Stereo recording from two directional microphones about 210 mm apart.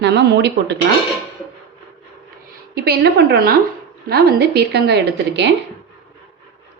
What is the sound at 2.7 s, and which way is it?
A woman's voice, 50° right (ahead or behind).